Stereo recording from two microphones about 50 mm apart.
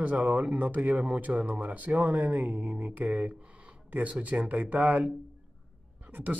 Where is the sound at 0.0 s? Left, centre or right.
Right.